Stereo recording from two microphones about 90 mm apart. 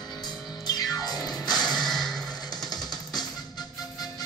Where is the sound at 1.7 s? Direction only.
5° left (ahead or behind).